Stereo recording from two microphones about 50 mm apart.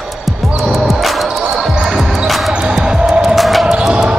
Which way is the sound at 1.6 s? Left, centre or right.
Centre.